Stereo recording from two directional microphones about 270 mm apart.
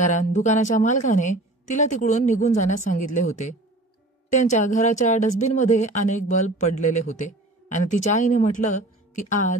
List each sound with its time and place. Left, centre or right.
0.1 s a woman's voice: left